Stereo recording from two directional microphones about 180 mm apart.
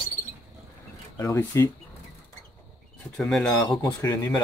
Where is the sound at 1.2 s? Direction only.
15° left (ahead or behind).